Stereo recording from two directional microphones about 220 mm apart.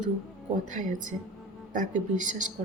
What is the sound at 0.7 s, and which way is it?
A woman's voice, 35° right (ahead or behind).